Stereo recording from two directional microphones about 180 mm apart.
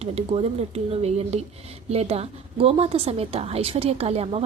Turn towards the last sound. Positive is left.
turn(degrees=-35)  # may be behind; listen again after turning